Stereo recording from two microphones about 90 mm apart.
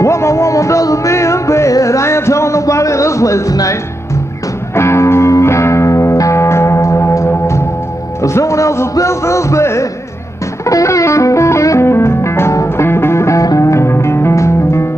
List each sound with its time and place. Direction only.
0.0 s music: 35° left (ahead or behind)
4.7 s music: 30° left (ahead or behind)